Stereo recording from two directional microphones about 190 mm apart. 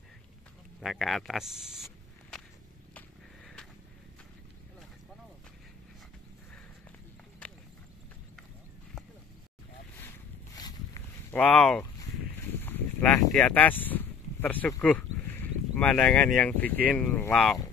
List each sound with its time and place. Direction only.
0.7 s speech: centre (ahead or behind)
9.9 s boat: 15° left (ahead or behind)
11.3 s speech: 5° left (ahead or behind)